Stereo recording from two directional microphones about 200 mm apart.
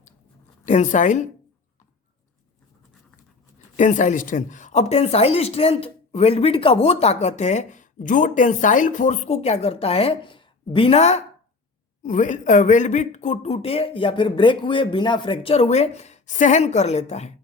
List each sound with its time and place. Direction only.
0.6 s speech: 35° left (ahead or behind)
3.8 s speech: 40° left (ahead or behind)